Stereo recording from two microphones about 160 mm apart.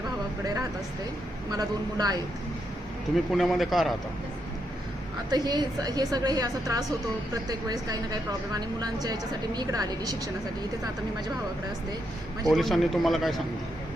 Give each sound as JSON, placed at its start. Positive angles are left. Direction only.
{"t": 0.4, "sound": "a sound", "side_deg": -20}
{"t": 1.5, "sound": "a woman's voice", "side_deg": -25}
{"t": 3.3, "sound": "a man's voice", "side_deg": 0}
{"t": 5.3, "sound": "a woman's voice", "side_deg": -25}
{"t": 12.5, "sound": "a man's voice", "side_deg": 0}